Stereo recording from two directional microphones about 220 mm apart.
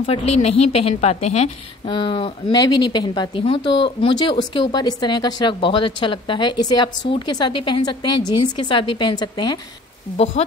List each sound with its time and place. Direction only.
0.0 s a woman's voice: 25° left (ahead or behind)